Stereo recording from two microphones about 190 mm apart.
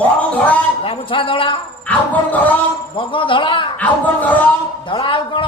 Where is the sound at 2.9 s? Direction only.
25° left (ahead or behind).